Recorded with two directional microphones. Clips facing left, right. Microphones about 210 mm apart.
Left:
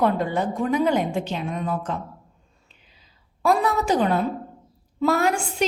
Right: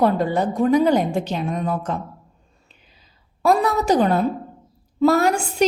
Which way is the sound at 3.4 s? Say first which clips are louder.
Right 3 dB; 40° right (ahead or behind).